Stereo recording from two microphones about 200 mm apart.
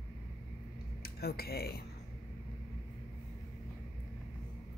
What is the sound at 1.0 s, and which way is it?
Speech, 50° left (ahead or behind).